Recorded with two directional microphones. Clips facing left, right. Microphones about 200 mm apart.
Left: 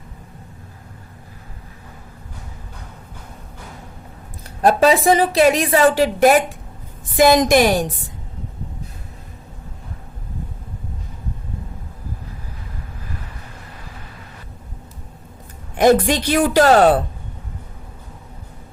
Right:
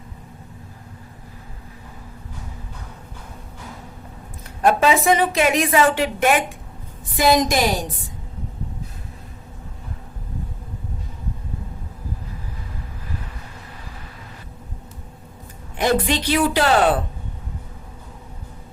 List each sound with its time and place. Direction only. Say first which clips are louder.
4.6 s a woman's voice: left 3 dB; 35° left (ahead or behind)
7.2 s a woman's voice: left 5 dB; 50° left (ahead or behind)
15.7 s a woman's voice: left 6 dB; 45° left (ahead or behind)